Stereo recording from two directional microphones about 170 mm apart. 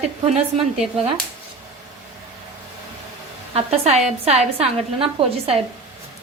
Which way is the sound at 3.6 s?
35° right (ahead or behind).